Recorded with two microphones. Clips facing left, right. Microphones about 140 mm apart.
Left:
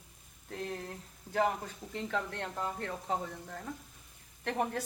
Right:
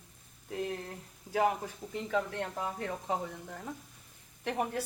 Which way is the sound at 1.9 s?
5° right (ahead or behind).